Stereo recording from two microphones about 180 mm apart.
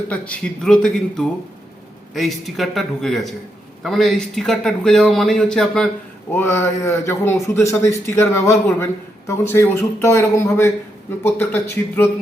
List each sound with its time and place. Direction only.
0.1 s speech: 5° left (ahead or behind)
6.3 s speech: 15° left (ahead or behind)